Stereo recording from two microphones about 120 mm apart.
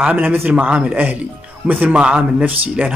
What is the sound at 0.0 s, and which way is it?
Speech, 15° right (ahead or behind).